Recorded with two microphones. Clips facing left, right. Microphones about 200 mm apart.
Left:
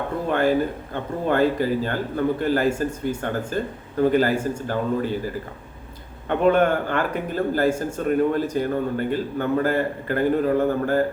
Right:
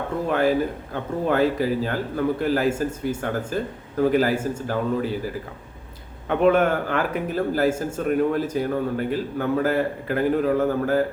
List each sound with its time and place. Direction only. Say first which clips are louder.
0.3 s a man's voice: left 1 dB; 5° right (ahead or behind)